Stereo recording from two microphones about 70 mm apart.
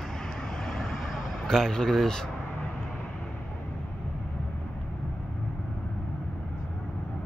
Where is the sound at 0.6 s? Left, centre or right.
Centre.